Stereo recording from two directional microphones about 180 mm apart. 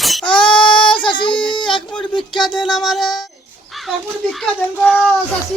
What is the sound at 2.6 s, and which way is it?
Music, centre (ahead or behind).